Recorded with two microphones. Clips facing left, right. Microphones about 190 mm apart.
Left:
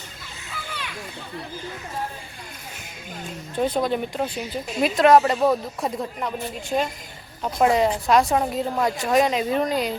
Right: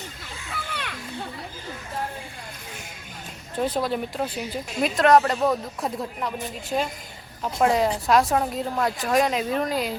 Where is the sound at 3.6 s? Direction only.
5° right (ahead or behind).